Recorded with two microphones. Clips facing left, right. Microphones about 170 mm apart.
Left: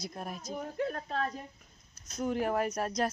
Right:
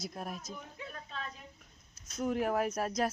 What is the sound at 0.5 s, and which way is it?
Speech, 50° left (ahead or behind).